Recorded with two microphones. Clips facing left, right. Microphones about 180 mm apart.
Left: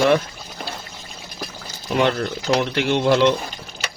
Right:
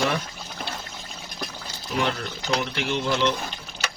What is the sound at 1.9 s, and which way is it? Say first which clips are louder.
Speech: left 7 dB; 90° left.